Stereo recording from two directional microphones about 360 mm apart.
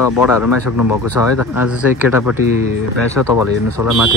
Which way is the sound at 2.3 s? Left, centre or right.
Centre.